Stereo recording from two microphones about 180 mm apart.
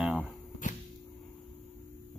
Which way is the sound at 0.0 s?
5° right (ahead or behind).